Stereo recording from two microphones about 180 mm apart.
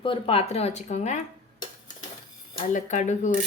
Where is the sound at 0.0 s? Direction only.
30° left (ahead or behind).